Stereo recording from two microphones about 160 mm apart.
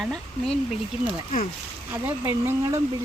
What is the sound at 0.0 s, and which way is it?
Speech, centre (ahead or behind).